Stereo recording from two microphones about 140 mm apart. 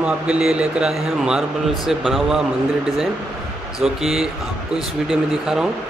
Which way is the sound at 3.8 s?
Centre (ahead or behind).